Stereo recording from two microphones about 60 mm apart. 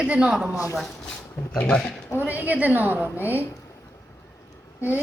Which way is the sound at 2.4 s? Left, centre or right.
Right.